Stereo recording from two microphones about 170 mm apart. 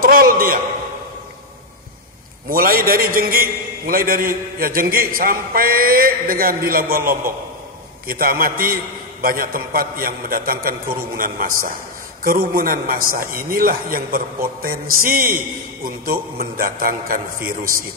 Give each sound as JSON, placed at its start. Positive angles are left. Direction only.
{"t": 0.0, "sound": "a sound", "side_deg": -60}
{"t": 2.5, "sound": "a man's voice", "side_deg": -60}
{"t": 8.1, "sound": "a man's voice", "side_deg": -60}